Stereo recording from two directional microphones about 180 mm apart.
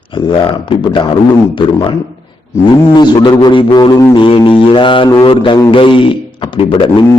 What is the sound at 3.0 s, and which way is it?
Mantra, 25° left (ahead or behind).